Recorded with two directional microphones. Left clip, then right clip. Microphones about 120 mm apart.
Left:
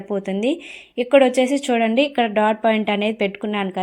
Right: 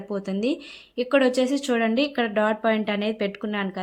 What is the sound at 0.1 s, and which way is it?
A woman's voice, 20° left (ahead or behind).